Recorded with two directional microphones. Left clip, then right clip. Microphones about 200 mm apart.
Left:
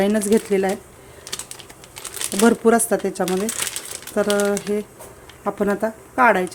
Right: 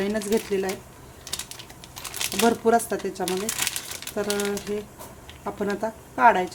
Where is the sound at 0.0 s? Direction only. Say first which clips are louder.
Left 7 dB; 30° left (ahead or behind).